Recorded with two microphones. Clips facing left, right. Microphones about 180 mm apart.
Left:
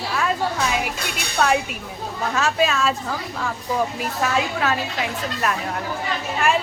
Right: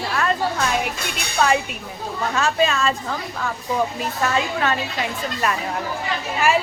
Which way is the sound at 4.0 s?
5° left (ahead or behind).